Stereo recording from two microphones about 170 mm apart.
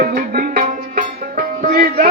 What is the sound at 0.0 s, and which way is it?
Music, 55° right (ahead or behind).